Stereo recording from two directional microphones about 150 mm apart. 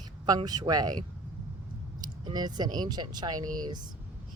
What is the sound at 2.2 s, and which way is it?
Speech, 30° right (ahead or behind).